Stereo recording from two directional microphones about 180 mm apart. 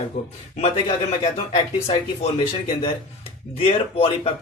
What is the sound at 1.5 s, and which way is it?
Speech, 35° left (ahead or behind).